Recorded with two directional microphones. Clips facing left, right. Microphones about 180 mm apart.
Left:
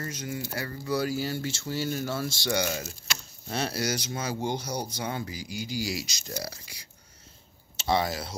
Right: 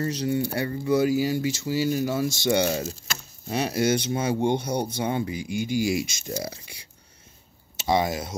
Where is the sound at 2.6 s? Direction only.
35° right (ahead or behind).